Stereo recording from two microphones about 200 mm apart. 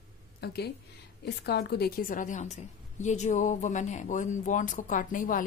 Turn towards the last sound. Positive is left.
turn(degrees=40)  # may be behind; listen again after turning